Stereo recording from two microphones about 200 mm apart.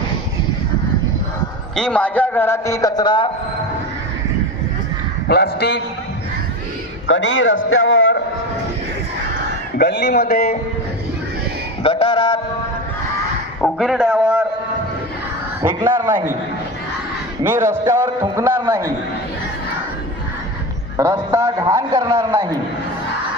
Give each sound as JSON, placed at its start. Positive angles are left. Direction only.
{"t": 1.7, "sound": "a man's voice", "side_deg": 5}
{"t": 5.3, "sound": "a man's voice", "side_deg": 55}
{"t": 7.1, "sound": "a man's voice", "side_deg": 65}
{"t": 9.7, "sound": "speech", "side_deg": 50}
{"t": 11.8, "sound": "speech", "side_deg": 25}
{"t": 13.6, "sound": "a man's voice", "side_deg": 0}
{"t": 15.6, "sound": "a man's voice", "side_deg": -10}
{"t": 17.4, "sound": "a man's voice", "side_deg": -10}
{"t": 20.9, "sound": "a man's voice", "side_deg": -15}